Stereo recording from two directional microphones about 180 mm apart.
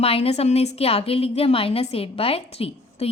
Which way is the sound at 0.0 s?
35° left (ahead or behind).